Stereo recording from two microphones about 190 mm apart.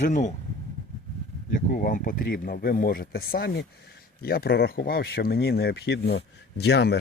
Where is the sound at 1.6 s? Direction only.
45° left (ahead or behind).